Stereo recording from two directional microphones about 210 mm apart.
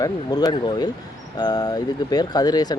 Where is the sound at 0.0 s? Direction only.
20° left (ahead or behind).